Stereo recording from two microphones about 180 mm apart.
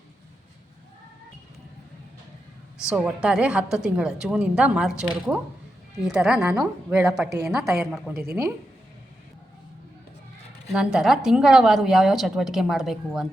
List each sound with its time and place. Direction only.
2.9 s a woman's voice: 5° right (ahead or behind)
8.1 s a woman's voice: 60° right (ahead or behind)
10.7 s a woman's voice: centre (ahead or behind)